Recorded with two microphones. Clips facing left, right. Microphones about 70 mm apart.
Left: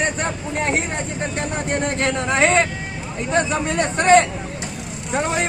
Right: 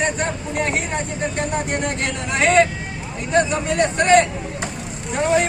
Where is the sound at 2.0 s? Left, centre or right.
Left.